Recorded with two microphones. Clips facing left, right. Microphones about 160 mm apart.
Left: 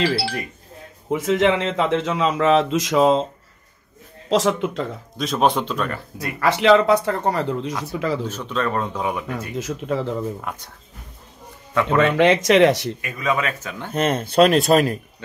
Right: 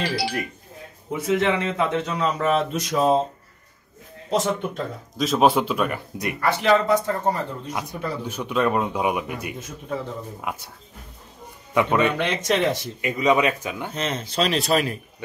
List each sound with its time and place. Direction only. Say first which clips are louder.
1.1 s speech: left 3 dB; 90° left
4.3 s speech: left 4 dB; 90° left
5.1 s speech: right 1 dB; centre (ahead or behind)
6.4 s speech: left 5 dB; 90° left; by 7.7 s 75° left (ahead or behind)
7.9 s speech: left 9 dB; 90° left
8.3 s speech: right 2 dB; 10° right (ahead or behind)
9.6 s speech: left 6 dB; 90° left
10.4 s speech: right 1 dB; 10° right (ahead or behind)
11.7 s speech: left 2 dB; 15° right (ahead or behind)
12.2 s speech: left 8 dB; 90° left
13.0 s speech: right 6 dB; 20° right (ahead or behind)
13.9 s speech: left 10 dB; 55° left (ahead or behind)